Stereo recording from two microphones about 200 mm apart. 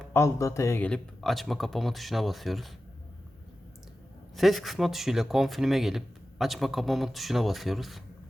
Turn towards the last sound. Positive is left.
turn(degrees=0)  # may be behind; listen again after turning